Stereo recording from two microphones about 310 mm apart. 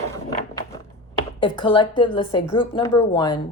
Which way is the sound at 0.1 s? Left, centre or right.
Centre.